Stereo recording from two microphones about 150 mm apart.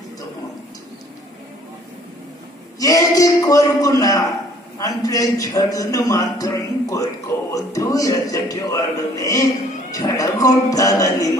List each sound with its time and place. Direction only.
2.8 s a man's voice: 25° left (ahead or behind)